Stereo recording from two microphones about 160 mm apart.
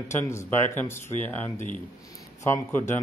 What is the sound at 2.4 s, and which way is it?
Speech, 15° left (ahead or behind).